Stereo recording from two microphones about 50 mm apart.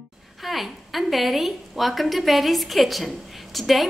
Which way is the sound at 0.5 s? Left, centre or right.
Centre.